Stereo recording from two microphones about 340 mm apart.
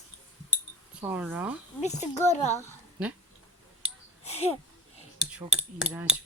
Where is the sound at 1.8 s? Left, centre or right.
Centre.